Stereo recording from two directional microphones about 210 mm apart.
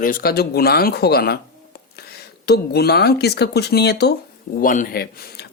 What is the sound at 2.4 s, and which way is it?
Speech, 50° left (ahead or behind).